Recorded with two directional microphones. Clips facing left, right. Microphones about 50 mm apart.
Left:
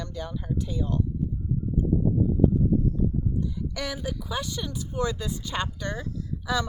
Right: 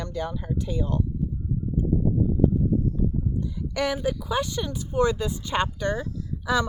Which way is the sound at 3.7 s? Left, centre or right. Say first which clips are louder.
Right 11 dB; right.